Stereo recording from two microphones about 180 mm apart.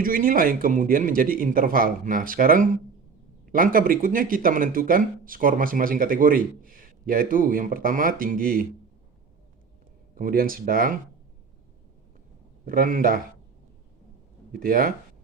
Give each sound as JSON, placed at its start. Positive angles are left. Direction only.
{"t": 0.0, "sound": "speech", "side_deg": -50}
{"t": 10.2, "sound": "speech", "side_deg": -50}
{"t": 12.6, "sound": "speech", "side_deg": -55}
{"t": 14.5, "sound": "speech", "side_deg": -50}